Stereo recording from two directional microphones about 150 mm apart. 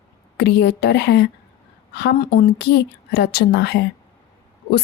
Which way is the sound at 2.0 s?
80° left.